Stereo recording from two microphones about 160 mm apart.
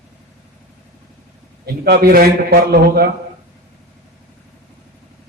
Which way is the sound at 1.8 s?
75° right (ahead or behind).